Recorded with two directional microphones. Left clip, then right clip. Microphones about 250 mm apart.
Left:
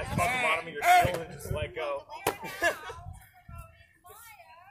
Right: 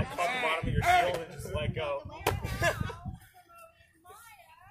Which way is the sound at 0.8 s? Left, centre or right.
Left.